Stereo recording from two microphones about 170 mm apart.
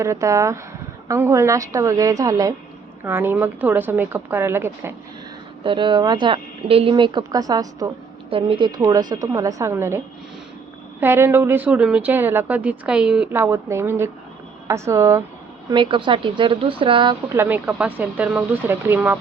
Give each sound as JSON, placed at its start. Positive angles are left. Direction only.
{"t": 0.0, "sound": "a woman's voice", "side_deg": -20}
{"t": 5.6, "sound": "speech", "side_deg": -30}
{"t": 8.3, "sound": "speech", "side_deg": -30}
{"t": 11.0, "sound": "a woman's voice", "side_deg": -15}
{"t": 15.7, "sound": "speech", "side_deg": -30}
{"t": 17.3, "sound": "a woman's voice", "side_deg": -10}